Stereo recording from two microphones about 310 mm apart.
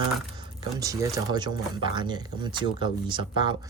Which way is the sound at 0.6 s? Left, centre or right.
Centre.